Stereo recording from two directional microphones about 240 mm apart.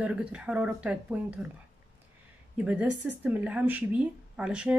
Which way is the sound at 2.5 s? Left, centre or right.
Centre.